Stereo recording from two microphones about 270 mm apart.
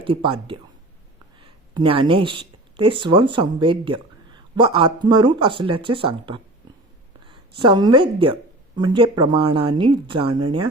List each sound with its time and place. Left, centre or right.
0.0 s speech: centre